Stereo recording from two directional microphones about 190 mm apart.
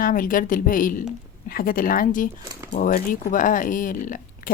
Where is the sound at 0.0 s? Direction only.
45° left (ahead or behind).